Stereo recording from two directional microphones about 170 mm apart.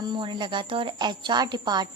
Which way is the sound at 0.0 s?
25° right (ahead or behind).